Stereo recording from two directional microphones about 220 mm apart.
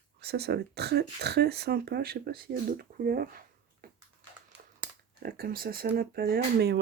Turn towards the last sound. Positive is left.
turn(degrees=-45)  # may be behind; listen again after turning